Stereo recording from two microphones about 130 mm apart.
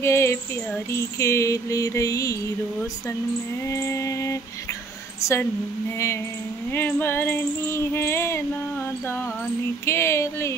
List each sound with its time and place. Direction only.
0.0 s mantra: 20° left (ahead or behind)
3.6 s mantra: 20° left (ahead or behind)
5.2 s a woman's voice: 20° left (ahead or behind)
6.7 s child singing: 15° left (ahead or behind)
9.8 s mantra: 20° left (ahead or behind)